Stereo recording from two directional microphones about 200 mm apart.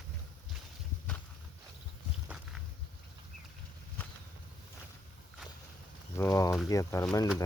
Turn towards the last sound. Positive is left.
turn(degrees=15)  # may be behind; listen again after turning